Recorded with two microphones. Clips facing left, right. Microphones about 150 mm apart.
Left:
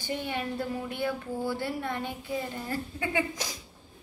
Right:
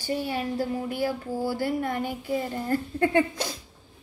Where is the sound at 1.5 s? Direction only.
45° right (ahead or behind).